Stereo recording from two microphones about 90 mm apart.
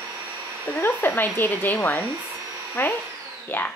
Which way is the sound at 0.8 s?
25° left (ahead or behind).